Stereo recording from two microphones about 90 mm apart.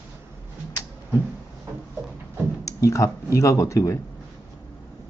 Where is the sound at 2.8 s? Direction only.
35° left (ahead or behind).